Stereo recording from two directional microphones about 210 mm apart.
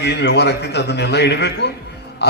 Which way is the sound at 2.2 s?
55° left (ahead or behind).